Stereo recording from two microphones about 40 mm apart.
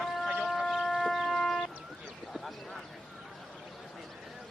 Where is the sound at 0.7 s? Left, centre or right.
Centre.